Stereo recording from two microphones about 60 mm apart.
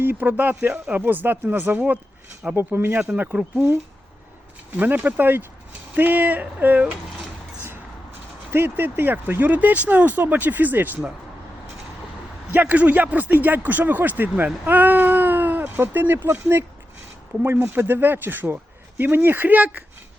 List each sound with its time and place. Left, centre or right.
0.0 s speech: right
3.3 s speech: right
4.9 s speech: right
8.4 s speech: right
12.5 s speech: right